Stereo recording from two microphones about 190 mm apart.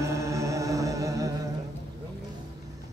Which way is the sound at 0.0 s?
15° right (ahead or behind).